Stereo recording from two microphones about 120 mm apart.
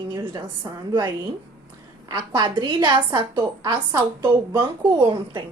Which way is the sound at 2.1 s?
40° right (ahead or behind).